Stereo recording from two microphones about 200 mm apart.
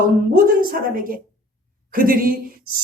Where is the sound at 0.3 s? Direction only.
45° right (ahead or behind).